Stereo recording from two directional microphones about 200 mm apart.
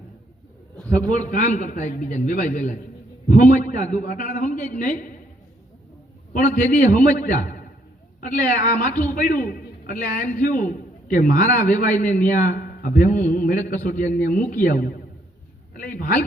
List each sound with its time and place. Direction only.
1.0 s a man's voice: 40° left (ahead or behind)
6.3 s a man's voice: 40° left (ahead or behind)